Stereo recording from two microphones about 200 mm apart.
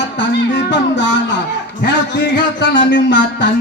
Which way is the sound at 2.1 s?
60° left (ahead or behind).